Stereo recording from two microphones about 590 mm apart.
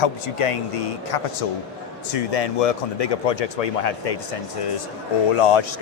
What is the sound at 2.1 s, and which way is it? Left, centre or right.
Speech, left.